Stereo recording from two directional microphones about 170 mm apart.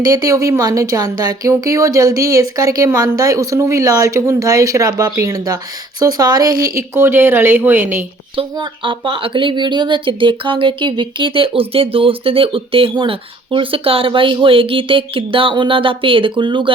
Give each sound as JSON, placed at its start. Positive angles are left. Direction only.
{"t": 0.0, "sound": "speech", "side_deg": -20}
{"t": 8.4, "sound": "speech", "side_deg": -30}